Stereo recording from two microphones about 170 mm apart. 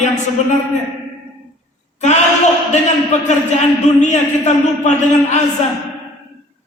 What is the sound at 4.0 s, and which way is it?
Speech, 45° left (ahead or behind).